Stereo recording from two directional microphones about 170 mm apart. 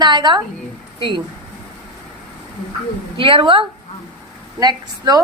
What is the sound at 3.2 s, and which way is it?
A woman's voice, 30° right (ahead or behind).